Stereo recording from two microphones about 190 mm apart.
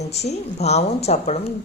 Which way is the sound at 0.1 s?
35° left (ahead or behind).